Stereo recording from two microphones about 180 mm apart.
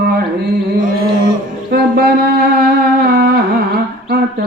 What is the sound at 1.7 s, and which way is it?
Speech, 60° right (ahead or behind).